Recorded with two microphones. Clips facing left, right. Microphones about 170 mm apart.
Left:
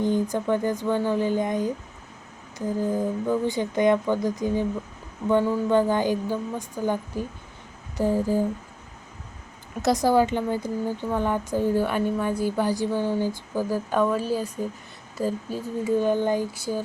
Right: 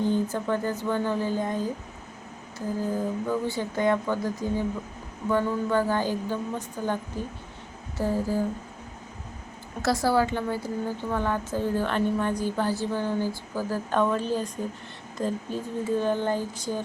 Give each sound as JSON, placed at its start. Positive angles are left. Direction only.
{"t": 0.0, "sound": "a woman's voice", "side_deg": 15}
{"t": 9.8, "sound": "a woman's voice", "side_deg": 20}